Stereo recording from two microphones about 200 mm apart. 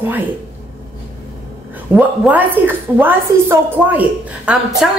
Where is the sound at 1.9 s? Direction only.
10° right (ahead or behind).